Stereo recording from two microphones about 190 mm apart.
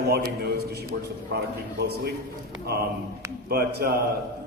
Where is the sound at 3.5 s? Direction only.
55° right (ahead or behind).